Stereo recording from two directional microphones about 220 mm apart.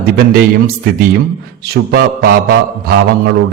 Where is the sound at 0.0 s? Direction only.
45° right (ahead or behind).